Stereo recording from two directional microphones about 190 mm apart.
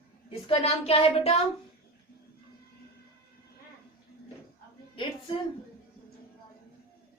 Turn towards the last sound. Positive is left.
turn(degrees=25)  # may be behind; listen again after turning